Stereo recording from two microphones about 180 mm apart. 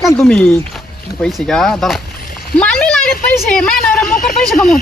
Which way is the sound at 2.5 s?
5° left (ahead or behind).